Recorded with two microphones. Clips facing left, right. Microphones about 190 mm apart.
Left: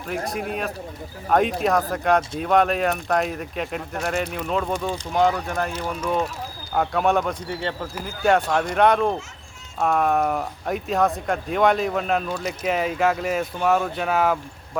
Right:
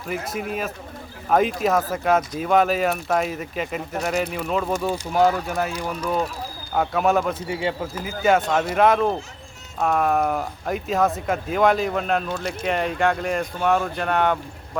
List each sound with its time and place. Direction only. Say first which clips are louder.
0.1 s speech: left 2 dB; 5° right (ahead or behind)
1.3 s speech: even; centre (ahead or behind)